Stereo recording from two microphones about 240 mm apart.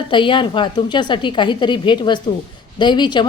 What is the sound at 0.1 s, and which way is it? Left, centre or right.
A woman's voice, centre.